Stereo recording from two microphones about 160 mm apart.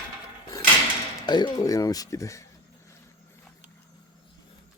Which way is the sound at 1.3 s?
25° left (ahead or behind).